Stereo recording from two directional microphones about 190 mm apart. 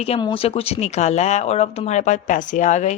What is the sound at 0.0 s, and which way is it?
Speech, 30° left (ahead or behind).